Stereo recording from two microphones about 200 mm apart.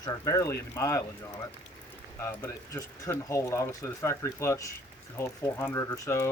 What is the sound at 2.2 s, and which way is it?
Speech, 15° left (ahead or behind).